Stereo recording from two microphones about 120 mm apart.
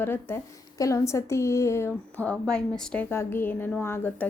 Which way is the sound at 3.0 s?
20° left (ahead or behind).